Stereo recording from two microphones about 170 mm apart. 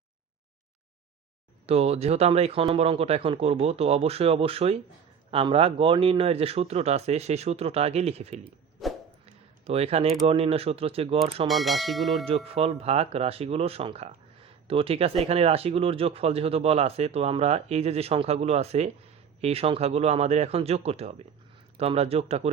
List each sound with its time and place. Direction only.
1.6 s speech: 35° right (ahead or behind)
8.8 s a sound: centre (ahead or behind)
9.2 s a sound: 35° right (ahead or behind)
10.2 s speech: 35° right (ahead or behind)
11.4 s speech: centre (ahead or behind)
12.2 s speech: 35° right (ahead or behind)